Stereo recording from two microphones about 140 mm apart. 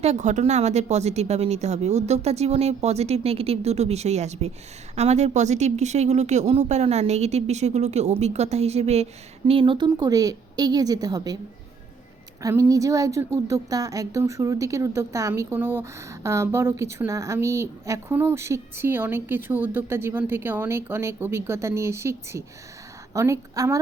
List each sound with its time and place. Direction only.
0.0 s speech: 55° right (ahead or behind)
9.5 s speech: 40° right (ahead or behind)
12.4 s speech: 25° right (ahead or behind)